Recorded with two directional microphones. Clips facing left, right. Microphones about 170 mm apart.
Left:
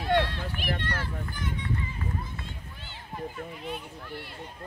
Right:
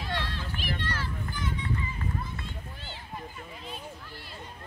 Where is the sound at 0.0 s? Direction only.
55° left (ahead or behind).